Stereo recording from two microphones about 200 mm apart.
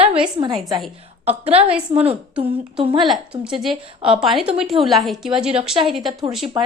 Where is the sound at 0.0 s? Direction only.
25° right (ahead or behind).